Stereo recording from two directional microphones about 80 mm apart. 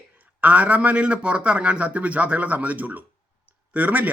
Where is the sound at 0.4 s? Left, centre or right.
Centre.